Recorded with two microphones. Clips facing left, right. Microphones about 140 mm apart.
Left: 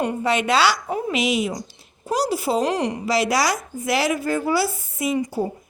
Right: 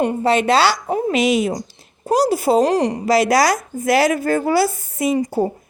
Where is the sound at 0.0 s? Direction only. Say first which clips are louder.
Right 5 dB; 35° right (ahead or behind).